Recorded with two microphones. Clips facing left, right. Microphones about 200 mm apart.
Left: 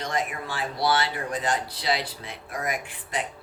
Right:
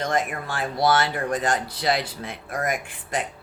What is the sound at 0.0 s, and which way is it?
Speech, 50° right (ahead or behind).